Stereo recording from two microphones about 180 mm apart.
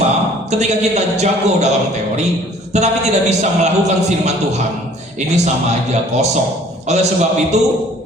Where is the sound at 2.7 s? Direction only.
40° right (ahead or behind).